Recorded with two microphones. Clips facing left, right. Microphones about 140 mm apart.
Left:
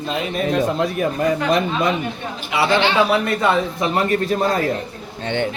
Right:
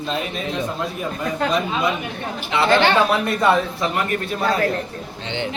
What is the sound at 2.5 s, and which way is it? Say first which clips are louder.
Speech: right 1 dB; 10° left (ahead or behind).